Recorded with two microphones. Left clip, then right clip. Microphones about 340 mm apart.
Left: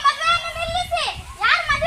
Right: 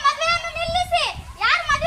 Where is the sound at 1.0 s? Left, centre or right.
Centre.